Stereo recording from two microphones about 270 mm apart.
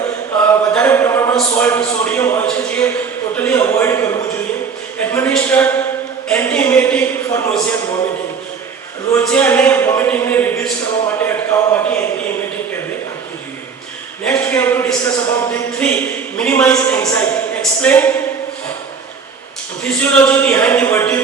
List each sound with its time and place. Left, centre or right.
0.4 s a man's voice: centre
9.1 s speech: centre
14.3 s a woman's voice: centre
19.8 s speech: centre